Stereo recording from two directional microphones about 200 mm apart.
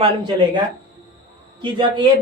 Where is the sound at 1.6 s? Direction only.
25° right (ahead or behind).